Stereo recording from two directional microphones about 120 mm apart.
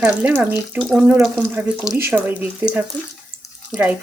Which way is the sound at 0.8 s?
Centre (ahead or behind).